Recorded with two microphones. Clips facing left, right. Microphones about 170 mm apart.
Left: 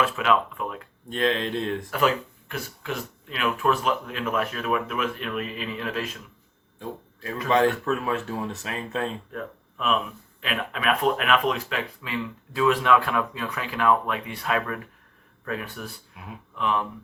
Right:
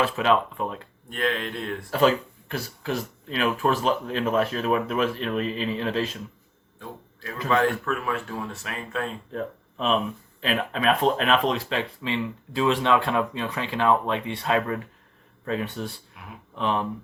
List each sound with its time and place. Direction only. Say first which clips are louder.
0.0 s speech: right 1 dB; 30° right (ahead or behind)
1.1 s speech: left 3 dB; 25° left (ahead or behind)
1.9 s speech: right 6 dB; 30° right (ahead or behind)
6.7 s a sound: left 4 dB; 25° left (ahead or behind)
7.4 s speech: left 2 dB; 25° left (ahead or behind)
9.3 s speech: right 4 dB; 30° right (ahead or behind)